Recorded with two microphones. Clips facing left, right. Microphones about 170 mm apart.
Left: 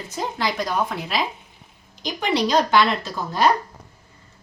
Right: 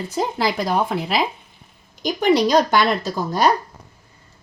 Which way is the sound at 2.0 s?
45° right (ahead or behind).